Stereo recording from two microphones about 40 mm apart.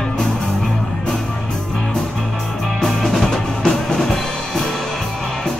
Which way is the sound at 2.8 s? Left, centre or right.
Centre.